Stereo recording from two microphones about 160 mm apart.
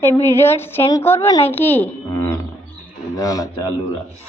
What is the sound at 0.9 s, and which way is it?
A man's voice, 15° left (ahead or behind).